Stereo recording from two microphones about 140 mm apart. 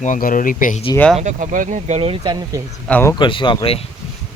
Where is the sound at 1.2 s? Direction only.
60° right (ahead or behind); by 2.6 s 25° right (ahead or behind).